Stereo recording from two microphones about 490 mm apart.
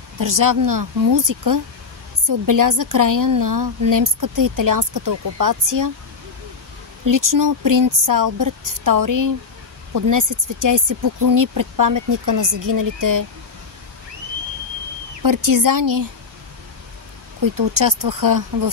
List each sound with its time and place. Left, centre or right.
0.2 s a woman's voice: right
7.1 s a woman's voice: right
15.2 s a woman's voice: right
17.7 s a woman's voice: right